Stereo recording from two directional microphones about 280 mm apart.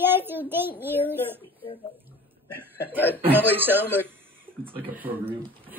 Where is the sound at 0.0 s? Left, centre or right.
Centre.